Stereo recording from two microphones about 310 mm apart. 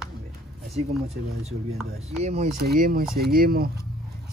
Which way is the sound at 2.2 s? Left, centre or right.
Right.